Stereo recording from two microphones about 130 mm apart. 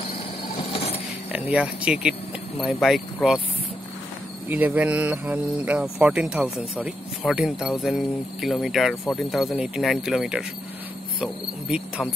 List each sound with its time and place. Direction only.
0.6 s a sound: 50° left (ahead or behind)
1.3 s speech: 10° right (ahead or behind)
4.5 s speech: 10° right (ahead or behind)